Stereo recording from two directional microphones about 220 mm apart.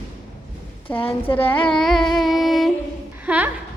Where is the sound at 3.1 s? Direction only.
5° right (ahead or behind).